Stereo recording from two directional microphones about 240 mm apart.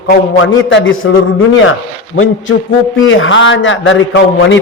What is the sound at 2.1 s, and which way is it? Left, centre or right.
A man's voice, left.